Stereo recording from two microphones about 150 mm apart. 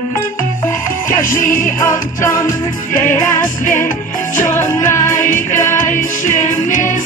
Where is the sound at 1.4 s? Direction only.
65° left (ahead or behind).